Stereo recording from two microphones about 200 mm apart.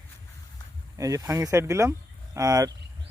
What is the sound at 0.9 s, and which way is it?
Speech, 15° right (ahead or behind).